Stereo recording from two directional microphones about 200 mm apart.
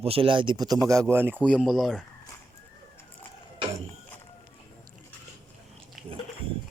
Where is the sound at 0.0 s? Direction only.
30° right (ahead or behind); by 2.0 s centre (ahead or behind).